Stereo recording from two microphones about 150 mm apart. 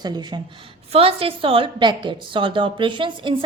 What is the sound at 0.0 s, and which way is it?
Speech, 30° right (ahead or behind).